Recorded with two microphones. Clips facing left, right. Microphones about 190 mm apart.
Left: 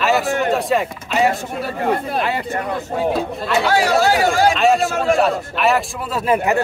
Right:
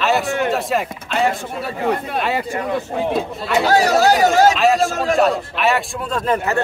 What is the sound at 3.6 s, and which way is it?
Speech, 40° right (ahead or behind).